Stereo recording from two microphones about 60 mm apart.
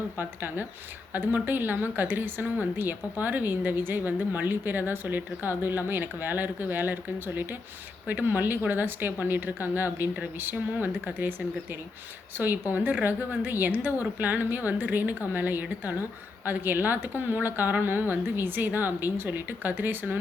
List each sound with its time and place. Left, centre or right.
0.2 s a woman's voice: right